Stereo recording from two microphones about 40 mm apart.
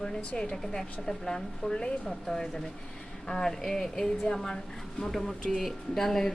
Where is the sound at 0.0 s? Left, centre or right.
Centre.